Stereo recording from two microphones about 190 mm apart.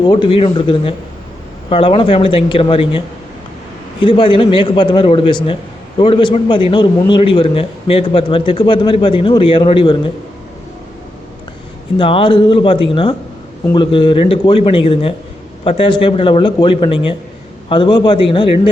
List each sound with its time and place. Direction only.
0.0 s a man's voice: 25° left (ahead or behind)
4.0 s a man's voice: 25° left (ahead or behind)
11.9 s a man's voice: 25° left (ahead or behind)